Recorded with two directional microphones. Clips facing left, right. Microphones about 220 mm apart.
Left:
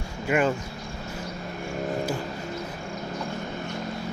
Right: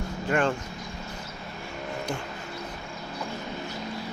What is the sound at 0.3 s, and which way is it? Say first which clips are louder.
Speech: left 2 dB; 10° left (ahead or behind).